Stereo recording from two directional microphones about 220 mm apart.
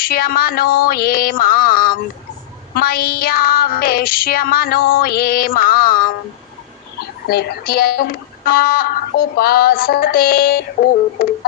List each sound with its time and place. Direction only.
0.0 s female singing: 40° left (ahead or behind)
7.3 s female singing: 45° left (ahead or behind)